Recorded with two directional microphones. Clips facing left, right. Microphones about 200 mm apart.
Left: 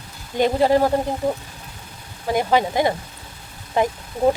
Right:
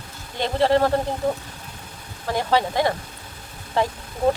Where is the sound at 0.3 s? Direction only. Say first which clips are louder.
Left 3 dB; 15° left (ahead or behind).